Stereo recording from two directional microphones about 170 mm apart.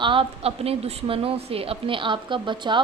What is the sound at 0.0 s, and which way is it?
A woman's voice, 30° right (ahead or behind).